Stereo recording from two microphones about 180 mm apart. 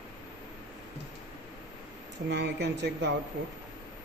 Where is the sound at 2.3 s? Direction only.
70° right (ahead or behind).